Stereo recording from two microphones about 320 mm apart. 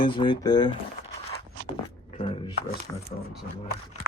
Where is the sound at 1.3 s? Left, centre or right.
Centre.